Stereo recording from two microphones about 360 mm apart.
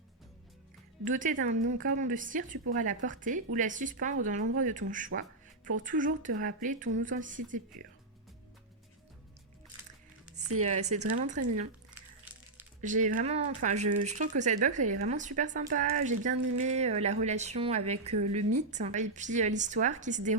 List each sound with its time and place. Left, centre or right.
1.0 s speech: right
10.3 s music: centre
10.7 s speech: centre
12.2 s music: centre
12.8 s a woman's voice: right